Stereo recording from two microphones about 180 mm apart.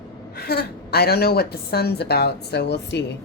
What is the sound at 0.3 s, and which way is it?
A woman's voice, 60° left (ahead or behind).